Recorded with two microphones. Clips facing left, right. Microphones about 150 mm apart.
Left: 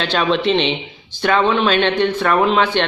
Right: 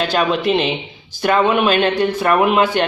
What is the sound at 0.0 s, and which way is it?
Speech, 5° right (ahead or behind).